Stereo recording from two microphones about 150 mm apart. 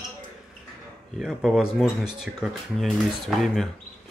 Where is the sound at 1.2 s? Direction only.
Centre (ahead or behind).